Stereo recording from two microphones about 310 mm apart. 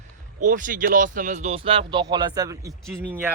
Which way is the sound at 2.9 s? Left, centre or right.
Centre.